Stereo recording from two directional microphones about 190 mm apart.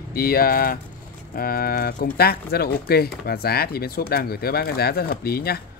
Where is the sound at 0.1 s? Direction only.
50° left (ahead or behind).